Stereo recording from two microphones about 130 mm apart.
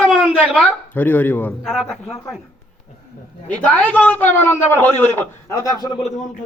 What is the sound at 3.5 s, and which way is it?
A man's voice, 10° left (ahead or behind).